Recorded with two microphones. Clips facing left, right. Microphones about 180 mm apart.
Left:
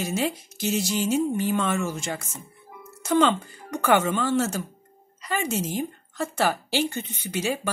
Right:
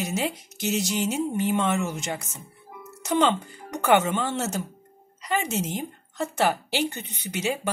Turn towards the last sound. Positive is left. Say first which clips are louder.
# left 1 dB
turn(degrees=-20)  # may be behind; listen again after turning